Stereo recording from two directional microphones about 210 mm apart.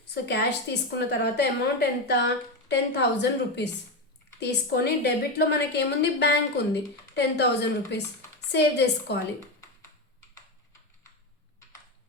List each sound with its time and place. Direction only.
0.1 s a woman's voice: 50° left (ahead or behind)